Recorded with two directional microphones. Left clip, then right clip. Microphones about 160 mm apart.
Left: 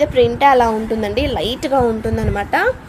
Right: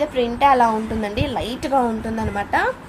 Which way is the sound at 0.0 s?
40° left (ahead or behind).